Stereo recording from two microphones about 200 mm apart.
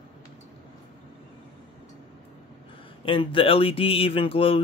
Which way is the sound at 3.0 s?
25° left (ahead or behind).